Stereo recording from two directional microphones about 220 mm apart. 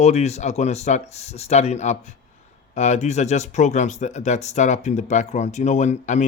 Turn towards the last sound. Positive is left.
turn(degrees=30)  # may be behind; listen again after turning